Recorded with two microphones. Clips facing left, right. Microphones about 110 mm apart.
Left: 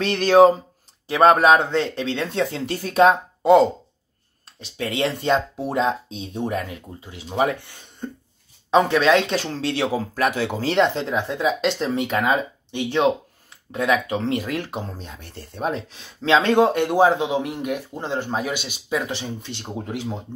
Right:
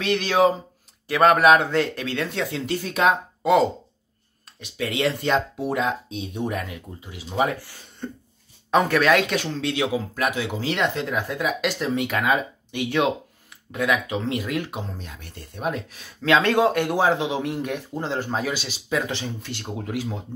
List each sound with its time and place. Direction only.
0.0 s speech: 40° left (ahead or behind)
1.0 s speech: 30° left (ahead or behind)